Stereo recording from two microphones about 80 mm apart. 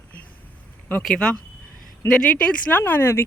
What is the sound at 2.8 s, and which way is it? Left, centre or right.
Speech, left.